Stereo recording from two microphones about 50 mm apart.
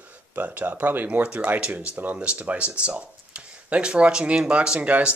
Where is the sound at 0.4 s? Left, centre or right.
Right.